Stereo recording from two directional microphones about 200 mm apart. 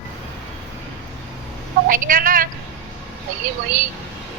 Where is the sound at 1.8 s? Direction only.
45° right (ahead or behind).